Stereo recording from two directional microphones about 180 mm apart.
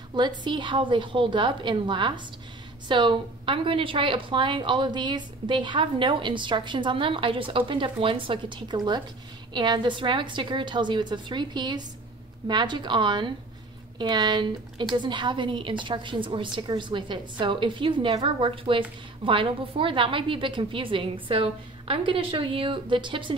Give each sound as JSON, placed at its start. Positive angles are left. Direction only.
{"t": 0.1, "sound": "a woman's voice", "side_deg": -25}